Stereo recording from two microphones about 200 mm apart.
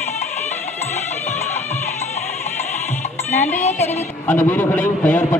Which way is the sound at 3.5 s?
35° left (ahead or behind).